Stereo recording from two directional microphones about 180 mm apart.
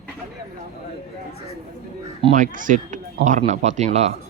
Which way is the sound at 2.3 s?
45° right (ahead or behind).